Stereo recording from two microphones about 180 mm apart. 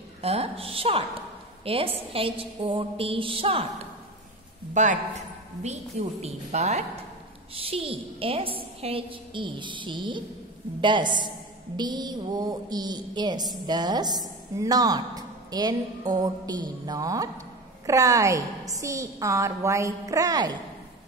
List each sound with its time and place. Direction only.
0.2 s a woman's voice: 35° right (ahead or behind)
4.8 s a woman's voice: 45° right (ahead or behind); by 20.5 s 20° right (ahead or behind)